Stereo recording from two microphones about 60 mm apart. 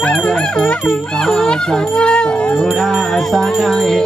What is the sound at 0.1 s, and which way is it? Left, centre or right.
Music, centre.